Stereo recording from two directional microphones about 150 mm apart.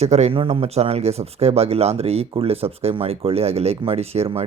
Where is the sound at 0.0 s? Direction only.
45° right (ahead or behind).